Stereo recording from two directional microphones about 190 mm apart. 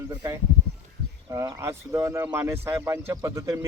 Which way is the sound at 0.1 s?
10° right (ahead or behind).